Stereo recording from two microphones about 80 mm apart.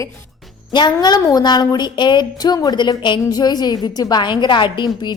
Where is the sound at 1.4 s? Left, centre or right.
Left.